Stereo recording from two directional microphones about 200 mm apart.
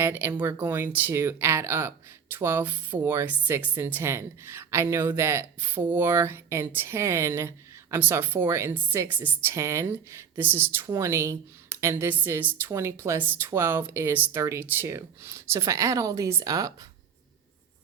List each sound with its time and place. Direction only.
0.0 s speech: 10° right (ahead or behind)